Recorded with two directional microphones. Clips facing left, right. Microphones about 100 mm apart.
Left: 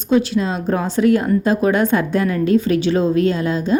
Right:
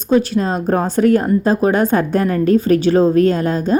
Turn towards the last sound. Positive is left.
turn(degrees=-45)  # may be behind; listen again after turning